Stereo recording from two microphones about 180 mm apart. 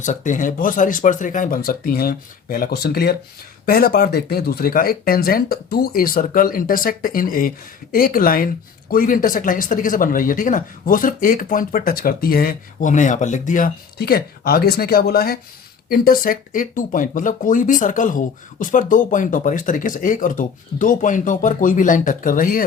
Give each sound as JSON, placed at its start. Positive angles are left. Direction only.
{"t": 0.0, "sound": "speech", "side_deg": 45}